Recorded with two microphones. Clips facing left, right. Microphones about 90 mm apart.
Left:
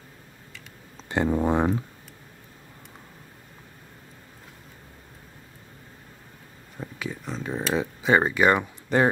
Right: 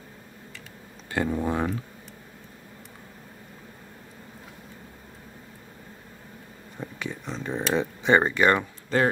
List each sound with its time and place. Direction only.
1.1 s speech: 25° left (ahead or behind)
6.8 s a sound: centre (ahead or behind)
8.9 s speech: 15° left (ahead or behind)